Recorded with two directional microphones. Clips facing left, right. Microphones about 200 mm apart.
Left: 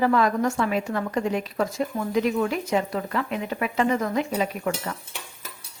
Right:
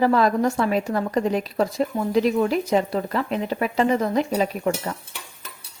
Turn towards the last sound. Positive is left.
turn(degrees=-30)  # may be behind; listen again after turning